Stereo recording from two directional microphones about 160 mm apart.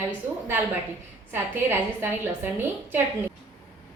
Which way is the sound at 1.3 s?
10° right (ahead or behind).